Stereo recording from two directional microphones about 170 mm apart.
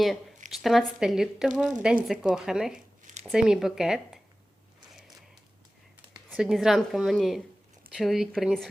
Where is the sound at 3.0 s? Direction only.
45° right (ahead or behind).